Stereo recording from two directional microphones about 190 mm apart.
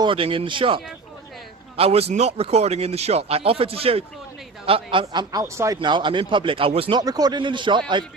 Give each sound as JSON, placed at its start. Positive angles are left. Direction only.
{"t": 0.0, "sound": "speech", "side_deg": -25}